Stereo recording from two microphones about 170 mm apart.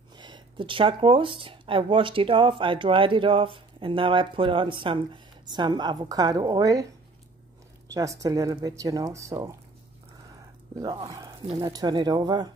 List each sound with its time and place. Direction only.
0.1 s speech: 25° right (ahead or behind)
7.9 s speech: 20° right (ahead or behind)
10.8 s speech: 25° right (ahead or behind)